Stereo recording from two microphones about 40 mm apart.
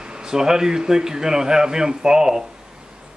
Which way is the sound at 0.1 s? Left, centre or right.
Centre.